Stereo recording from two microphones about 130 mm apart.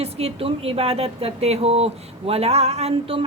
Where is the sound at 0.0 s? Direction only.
50° right (ahead or behind).